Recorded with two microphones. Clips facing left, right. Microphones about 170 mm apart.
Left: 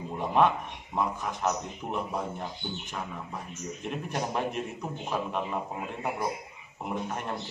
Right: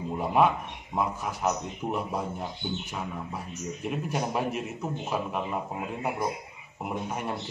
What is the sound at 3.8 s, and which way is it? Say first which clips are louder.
A man's voice: right 2 dB; 5° right (ahead or behind).